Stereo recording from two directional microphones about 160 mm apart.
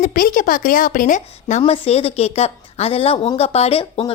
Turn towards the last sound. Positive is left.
turn(degrees=40)  # may be behind; listen again after turning